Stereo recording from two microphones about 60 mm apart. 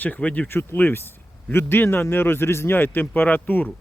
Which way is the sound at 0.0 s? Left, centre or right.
Left.